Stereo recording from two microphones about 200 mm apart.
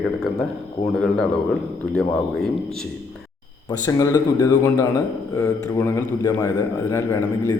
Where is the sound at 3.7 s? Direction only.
20° left (ahead or behind).